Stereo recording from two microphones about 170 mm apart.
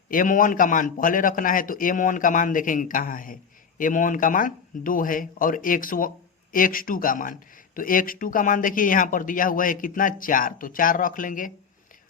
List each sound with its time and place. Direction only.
0.1 s speech: 55° left (ahead or behind)